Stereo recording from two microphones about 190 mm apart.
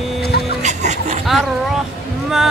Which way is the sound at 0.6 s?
35° right (ahead or behind).